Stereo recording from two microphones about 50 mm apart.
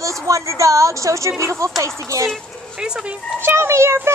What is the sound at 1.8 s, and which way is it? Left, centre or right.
Speech, right.